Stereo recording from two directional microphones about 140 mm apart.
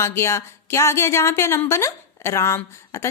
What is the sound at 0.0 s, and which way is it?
Speech, 20° left (ahead or behind).